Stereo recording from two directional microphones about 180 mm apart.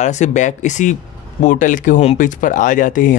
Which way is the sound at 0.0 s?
40° left (ahead or behind).